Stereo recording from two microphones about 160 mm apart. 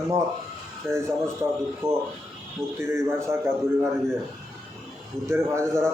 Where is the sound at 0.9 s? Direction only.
15° right (ahead or behind).